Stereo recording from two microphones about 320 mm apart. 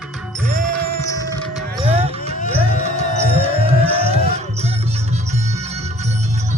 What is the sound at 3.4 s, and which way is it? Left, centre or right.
Music, centre.